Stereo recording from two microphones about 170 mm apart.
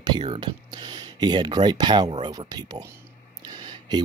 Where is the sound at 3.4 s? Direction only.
25° right (ahead or behind).